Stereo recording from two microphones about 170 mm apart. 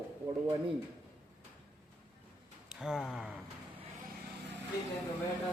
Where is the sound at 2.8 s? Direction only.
Centre (ahead or behind).